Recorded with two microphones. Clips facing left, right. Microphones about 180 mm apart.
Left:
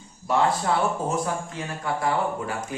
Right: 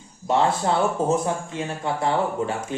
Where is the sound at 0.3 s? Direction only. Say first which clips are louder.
Right 2 dB; 25° right (ahead or behind).